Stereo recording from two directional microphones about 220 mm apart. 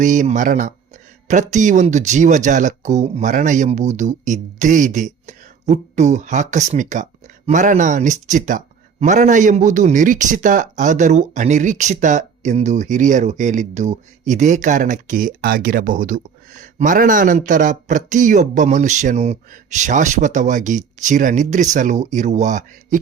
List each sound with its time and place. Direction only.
0.0 s speech: 35° right (ahead or behind)